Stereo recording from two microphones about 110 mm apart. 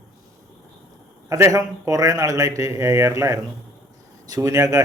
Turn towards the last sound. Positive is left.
turn(degrees=-35)  # may be behind; listen again after turning